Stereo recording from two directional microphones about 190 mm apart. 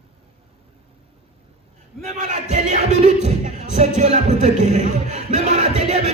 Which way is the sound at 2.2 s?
40° right (ahead or behind).